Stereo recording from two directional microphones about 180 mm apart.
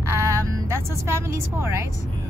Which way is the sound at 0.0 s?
15° right (ahead or behind).